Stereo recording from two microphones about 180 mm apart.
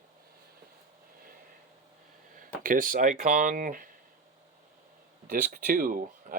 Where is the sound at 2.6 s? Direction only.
50° right (ahead or behind).